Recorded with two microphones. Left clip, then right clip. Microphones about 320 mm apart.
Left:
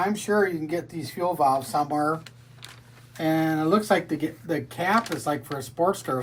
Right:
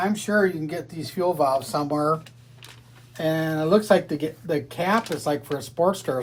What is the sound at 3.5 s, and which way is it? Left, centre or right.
Speech, centre.